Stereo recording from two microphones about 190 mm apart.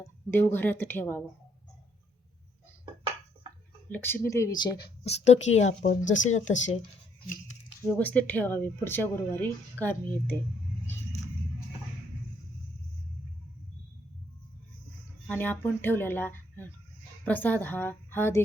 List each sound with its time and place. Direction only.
0.0 s speech: 10° left (ahead or behind)
3.8 s speech: 10° left (ahead or behind)
5.0 s speech: 35° left (ahead or behind)
6.1 s speech: 80° left
7.8 s speech: 10° left (ahead or behind)
15.3 s speech: 10° left (ahead or behind)